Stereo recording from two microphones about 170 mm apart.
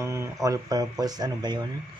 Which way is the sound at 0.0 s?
15° right (ahead or behind).